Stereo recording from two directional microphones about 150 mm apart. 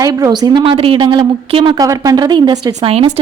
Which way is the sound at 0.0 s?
25° right (ahead or behind).